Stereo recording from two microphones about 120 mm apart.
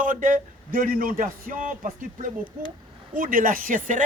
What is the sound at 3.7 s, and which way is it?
Speech, 90° right.